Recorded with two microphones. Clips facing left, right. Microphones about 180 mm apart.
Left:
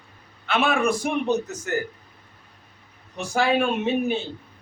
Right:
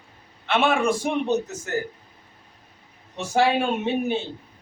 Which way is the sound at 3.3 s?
25° right (ahead or behind).